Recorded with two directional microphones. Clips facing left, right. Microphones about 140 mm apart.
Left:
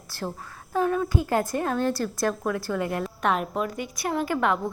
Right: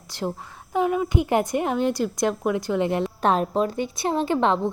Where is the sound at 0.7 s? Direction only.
15° right (ahead or behind).